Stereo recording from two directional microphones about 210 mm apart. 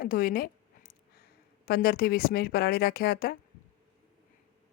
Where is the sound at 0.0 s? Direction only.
45° left (ahead or behind).